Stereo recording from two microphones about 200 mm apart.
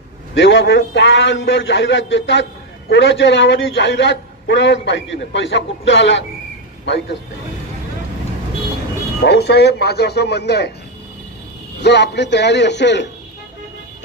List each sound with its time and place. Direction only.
0.3 s a man's voice: 65° left (ahead or behind)
9.2 s a man's voice: 55° left (ahead or behind)
11.8 s a man's voice: 55° left (ahead or behind)